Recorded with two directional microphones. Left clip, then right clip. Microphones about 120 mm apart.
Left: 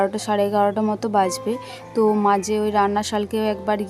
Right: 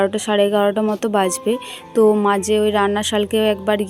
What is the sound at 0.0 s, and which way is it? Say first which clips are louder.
Speech: right 4 dB; 15° right (ahead or behind).